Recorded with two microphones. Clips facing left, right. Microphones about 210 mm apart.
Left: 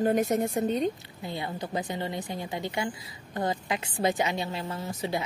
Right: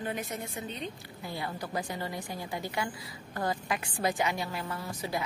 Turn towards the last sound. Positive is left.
turn(degrees=25)  # may be behind; listen again after turning